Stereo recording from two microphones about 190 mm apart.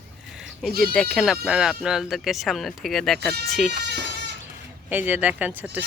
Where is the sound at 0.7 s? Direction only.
55° right (ahead or behind).